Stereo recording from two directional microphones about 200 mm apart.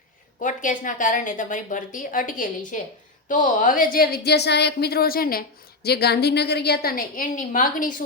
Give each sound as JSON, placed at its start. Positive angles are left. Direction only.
{"t": 0.4, "sound": "a woman's voice", "side_deg": 40}